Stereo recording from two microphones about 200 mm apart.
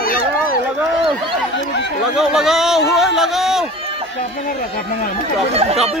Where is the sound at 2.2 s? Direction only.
Centre (ahead or behind).